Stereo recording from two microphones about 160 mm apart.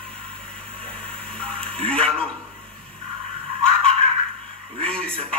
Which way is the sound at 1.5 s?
35° right (ahead or behind).